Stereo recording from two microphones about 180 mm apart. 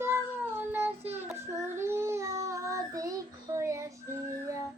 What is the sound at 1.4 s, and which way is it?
Child singing, 15° right (ahead or behind).